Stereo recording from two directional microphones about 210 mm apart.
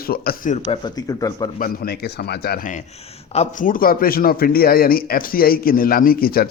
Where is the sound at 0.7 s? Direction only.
20° left (ahead or behind).